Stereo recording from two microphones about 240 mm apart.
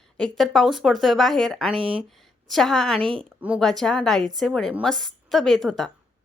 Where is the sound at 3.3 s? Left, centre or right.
Centre.